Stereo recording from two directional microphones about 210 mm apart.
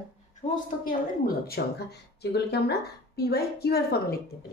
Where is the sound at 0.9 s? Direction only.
45° left (ahead or behind).